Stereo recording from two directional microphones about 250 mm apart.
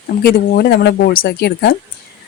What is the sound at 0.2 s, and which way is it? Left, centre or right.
Speech, left.